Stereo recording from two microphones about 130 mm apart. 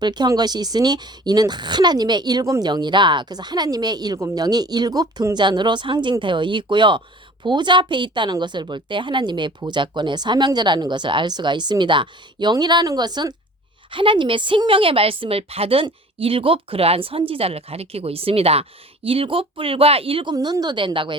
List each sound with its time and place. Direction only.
0.0 s speech: 35° right (ahead or behind)
20.3 s speech: 30° right (ahead or behind)